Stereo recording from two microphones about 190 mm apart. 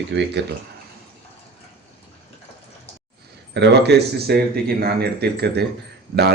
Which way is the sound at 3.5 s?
60° right (ahead or behind).